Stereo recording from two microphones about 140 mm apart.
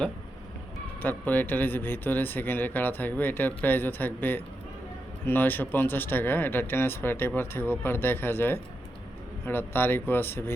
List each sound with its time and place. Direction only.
1.0 s speech: 15° left (ahead or behind)